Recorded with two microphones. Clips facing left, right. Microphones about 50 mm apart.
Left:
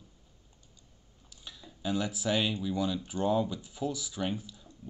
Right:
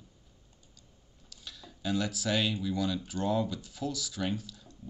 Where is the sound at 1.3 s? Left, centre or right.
Left.